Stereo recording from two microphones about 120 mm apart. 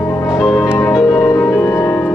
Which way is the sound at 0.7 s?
20° left (ahead or behind).